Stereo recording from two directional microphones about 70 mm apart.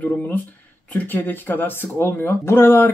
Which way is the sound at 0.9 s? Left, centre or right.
Left.